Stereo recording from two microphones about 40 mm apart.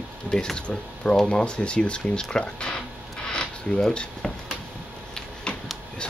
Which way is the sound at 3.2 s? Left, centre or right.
Left.